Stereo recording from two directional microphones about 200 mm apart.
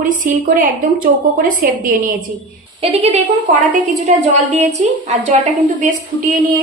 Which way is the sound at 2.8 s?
30° right (ahead or behind).